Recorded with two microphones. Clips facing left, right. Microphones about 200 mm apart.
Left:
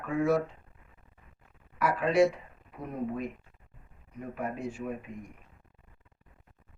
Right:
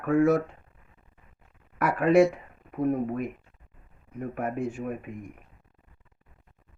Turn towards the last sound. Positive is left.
turn(degrees=-50)  # may be behind; listen again after turning